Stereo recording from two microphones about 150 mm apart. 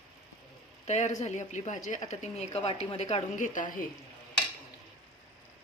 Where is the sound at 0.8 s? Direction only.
50° left (ahead or behind).